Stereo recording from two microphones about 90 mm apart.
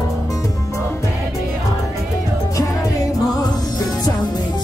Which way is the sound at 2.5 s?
40° left (ahead or behind).